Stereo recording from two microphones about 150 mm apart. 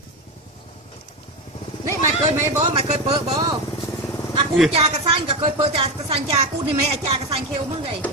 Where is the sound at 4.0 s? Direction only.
20° left (ahead or behind).